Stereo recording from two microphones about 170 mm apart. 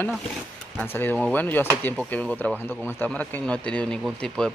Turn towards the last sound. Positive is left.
turn(degrees=5)  # may be behind; listen again after turning